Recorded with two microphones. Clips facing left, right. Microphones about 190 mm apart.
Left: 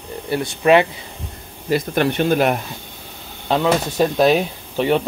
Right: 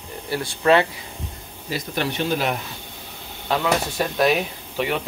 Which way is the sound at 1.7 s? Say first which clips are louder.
Left 8 dB; 55° left (ahead or behind).